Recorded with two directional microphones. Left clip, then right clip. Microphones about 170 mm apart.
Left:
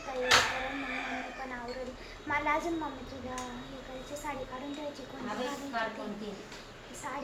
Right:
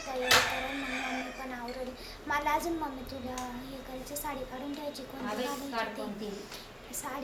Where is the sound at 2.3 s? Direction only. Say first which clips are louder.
Right 1 dB; 10° right (ahead or behind).